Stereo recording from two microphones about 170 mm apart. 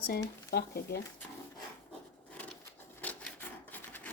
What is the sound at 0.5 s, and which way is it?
Speech, 65° left (ahead or behind).